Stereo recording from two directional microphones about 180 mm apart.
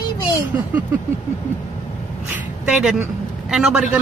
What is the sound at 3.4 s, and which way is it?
Speech, 5° right (ahead or behind).